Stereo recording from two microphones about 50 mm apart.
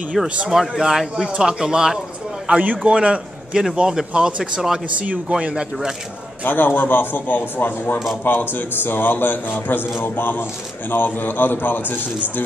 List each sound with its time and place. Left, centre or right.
0.2 s speech: centre
0.5 s speech: centre
2.4 s a man's voice: right; by 4.7 s centre
4.9 s speech: right
6.4 s a man's voice: left